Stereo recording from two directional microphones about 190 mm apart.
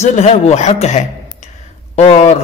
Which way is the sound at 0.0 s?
35° left (ahead or behind).